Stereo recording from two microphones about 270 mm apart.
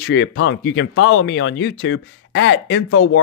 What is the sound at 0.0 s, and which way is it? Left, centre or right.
Speech, left.